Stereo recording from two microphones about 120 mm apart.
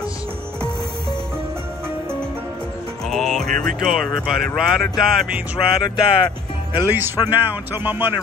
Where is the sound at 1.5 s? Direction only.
20° right (ahead or behind).